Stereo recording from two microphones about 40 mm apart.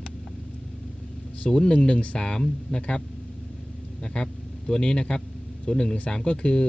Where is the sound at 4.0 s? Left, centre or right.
Left.